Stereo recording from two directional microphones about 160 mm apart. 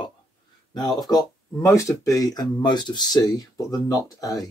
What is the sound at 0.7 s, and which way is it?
Speech, 25° left (ahead or behind).